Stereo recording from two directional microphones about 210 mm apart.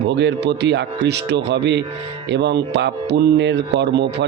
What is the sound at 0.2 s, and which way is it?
Speech, 55° right (ahead or behind).